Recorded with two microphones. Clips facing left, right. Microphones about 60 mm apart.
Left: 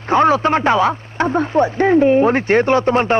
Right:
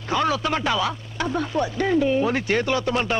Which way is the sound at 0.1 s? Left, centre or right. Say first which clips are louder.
Left 9 dB; left.